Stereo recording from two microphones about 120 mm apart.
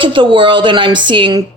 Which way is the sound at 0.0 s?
45° right (ahead or behind).